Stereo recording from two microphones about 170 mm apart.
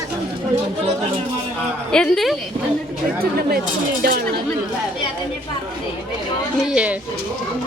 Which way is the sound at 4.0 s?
65° right (ahead or behind).